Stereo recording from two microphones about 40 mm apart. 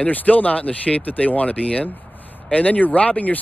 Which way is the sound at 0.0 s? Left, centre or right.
Left.